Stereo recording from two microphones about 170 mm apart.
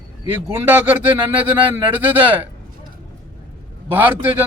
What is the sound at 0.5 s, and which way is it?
Speech, 10° right (ahead or behind).